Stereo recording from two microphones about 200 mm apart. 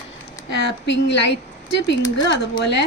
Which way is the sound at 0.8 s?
60° left (ahead or behind).